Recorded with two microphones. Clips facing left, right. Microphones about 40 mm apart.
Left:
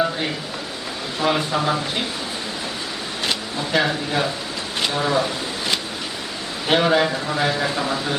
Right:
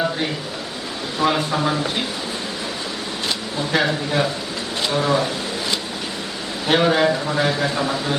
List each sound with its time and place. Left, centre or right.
1.2 s a man's voice: centre
3.7 s a man's voice: centre
6.7 s a man's voice: centre